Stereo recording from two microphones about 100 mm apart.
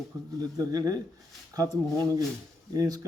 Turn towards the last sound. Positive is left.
turn(degrees=-35)  # may be behind; listen again after turning